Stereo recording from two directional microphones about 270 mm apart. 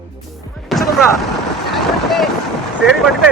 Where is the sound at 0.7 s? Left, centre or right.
Centre.